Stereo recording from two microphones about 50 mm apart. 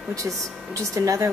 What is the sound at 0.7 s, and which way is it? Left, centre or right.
Speech, right.